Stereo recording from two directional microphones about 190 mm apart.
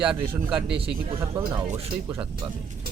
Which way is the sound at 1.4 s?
15° right (ahead or behind).